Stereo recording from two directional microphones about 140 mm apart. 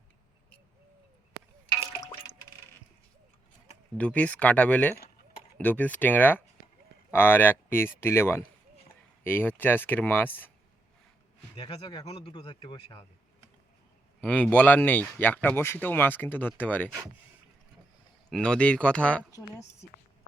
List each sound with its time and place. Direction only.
3.9 s speech: 10° left (ahead or behind)
11.5 s speech: 35° left (ahead or behind)
14.2 s speech: 5° left (ahead or behind)
18.3 s speech: 5° left (ahead or behind)
19.3 s a woman's voice: 20° left (ahead or behind)